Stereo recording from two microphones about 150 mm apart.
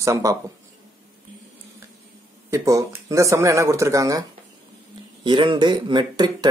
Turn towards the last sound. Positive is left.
turn(degrees=-30)  # may be behind; listen again after turning